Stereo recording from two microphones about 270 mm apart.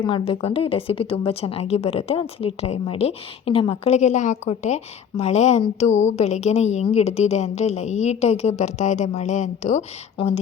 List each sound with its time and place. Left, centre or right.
0.0 s a woman's voice: centre